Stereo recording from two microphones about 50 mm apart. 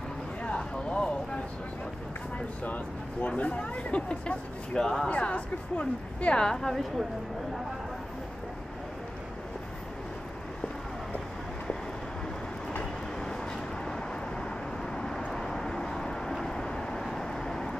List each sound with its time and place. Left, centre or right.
0.4 s a sound: left
2.3 s speech: left
4.7 s a woman's voice: centre
5.0 s speech: left
6.4 s a woman's voice: centre
15.0 s vehicle: centre